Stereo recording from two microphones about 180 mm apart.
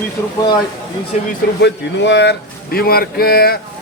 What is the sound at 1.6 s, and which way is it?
Speech, 75° left (ahead or behind).